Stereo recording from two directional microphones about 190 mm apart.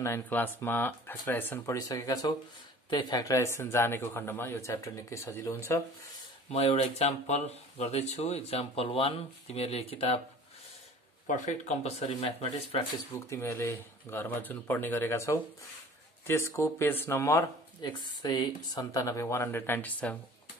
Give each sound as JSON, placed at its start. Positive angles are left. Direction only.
{"t": 0.0, "sound": "speech", "side_deg": 10}
{"t": 6.5, "sound": "speech", "side_deg": 30}
{"t": 11.2, "sound": "speech", "side_deg": 40}
{"t": 13.3, "sound": "speech", "side_deg": 15}